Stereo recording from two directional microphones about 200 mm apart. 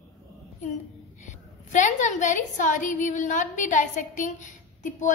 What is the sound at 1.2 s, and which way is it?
A woman's voice, 35° left (ahead or behind).